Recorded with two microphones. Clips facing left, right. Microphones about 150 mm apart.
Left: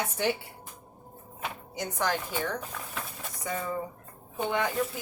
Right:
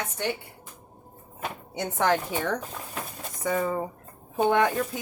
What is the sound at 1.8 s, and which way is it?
Speech, 65° right (ahead or behind).